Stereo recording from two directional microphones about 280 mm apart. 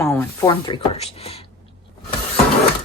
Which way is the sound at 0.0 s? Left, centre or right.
Centre.